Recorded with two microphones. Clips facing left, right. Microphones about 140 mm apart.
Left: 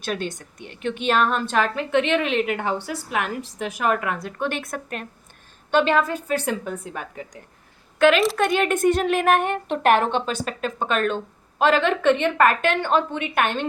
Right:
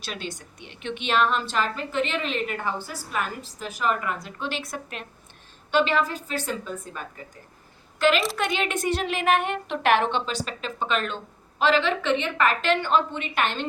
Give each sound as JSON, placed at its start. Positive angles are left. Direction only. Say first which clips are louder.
{"t": 0.0, "sound": "a woman's voice", "louder": "left 7 dB", "side_deg": 50}
{"t": 3.8, "sound": "a woman's voice", "louder": "left 3 dB", "side_deg": 60}